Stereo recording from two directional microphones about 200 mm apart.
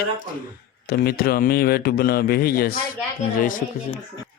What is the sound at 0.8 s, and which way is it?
Speech, 50° left (ahead or behind).